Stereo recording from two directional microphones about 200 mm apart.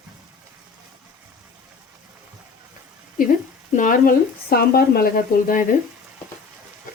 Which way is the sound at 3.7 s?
45° left (ahead or behind).